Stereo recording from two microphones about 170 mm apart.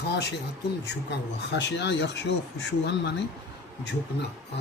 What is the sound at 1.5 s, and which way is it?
Speech, 90° left.